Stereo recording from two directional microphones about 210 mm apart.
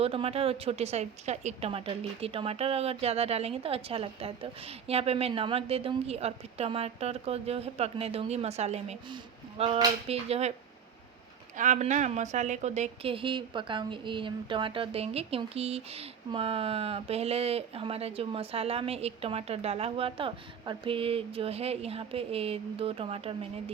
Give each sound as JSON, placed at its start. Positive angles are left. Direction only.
{"t": 0.0, "sound": "a woman's voice", "side_deg": -25}
{"t": 11.5, "sound": "a woman's voice", "side_deg": -35}